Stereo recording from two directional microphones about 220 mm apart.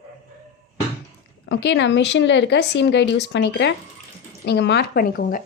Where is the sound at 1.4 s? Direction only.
50° left (ahead or behind).